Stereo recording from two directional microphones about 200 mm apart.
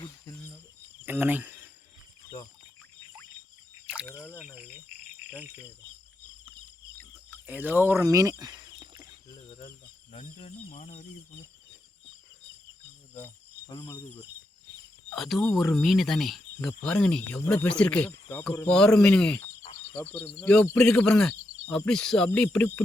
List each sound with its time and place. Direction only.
0.0 s cricket: 15° left (ahead or behind)
1.0 s cricket: 10° right (ahead or behind)
4.4 s cricket: 5° right (ahead or behind)
5.4 s speech: 10° right (ahead or behind)
7.4 s speech: 10° right (ahead or behind)
10.1 s speech: 30° left (ahead or behind)
13.1 s cricket: 15° left (ahead or behind)
15.1 s speech: centre (ahead or behind)